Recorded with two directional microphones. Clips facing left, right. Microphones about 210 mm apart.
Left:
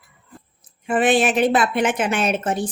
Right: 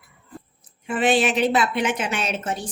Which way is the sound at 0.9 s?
50° left (ahead or behind).